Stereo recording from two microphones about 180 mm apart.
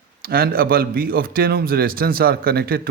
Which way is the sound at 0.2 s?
60° right (ahead or behind).